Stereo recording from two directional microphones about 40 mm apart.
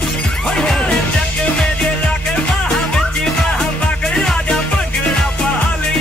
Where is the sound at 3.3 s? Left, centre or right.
Centre.